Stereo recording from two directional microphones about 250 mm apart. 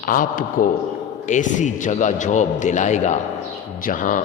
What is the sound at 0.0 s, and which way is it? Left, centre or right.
A man's voice, left.